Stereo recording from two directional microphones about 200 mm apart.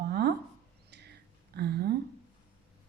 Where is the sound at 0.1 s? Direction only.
55° right (ahead or behind).